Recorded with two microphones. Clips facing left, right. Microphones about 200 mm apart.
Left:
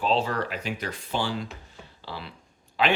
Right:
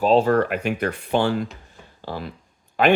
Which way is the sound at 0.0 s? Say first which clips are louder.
Right 9 dB; 50° right (ahead or behind).